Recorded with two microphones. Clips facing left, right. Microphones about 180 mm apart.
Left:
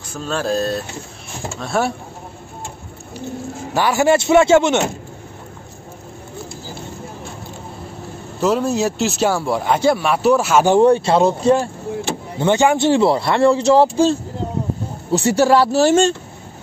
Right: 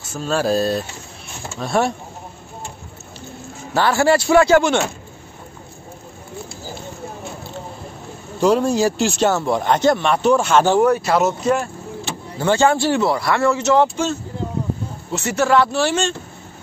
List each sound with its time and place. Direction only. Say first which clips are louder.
0.2 s speech: right 2 dB; 5° right (ahead or behind)
3.7 s speech: left 1 dB; 15° left (ahead or behind)
8.4 s speech: right 2 dB; 5° left (ahead or behind)
10.8 s speech: left 3 dB; 30° left (ahead or behind)
12.4 s a man's voice: left 1 dB; 20° left (ahead or behind); by 16.2 s 40° left (ahead or behind)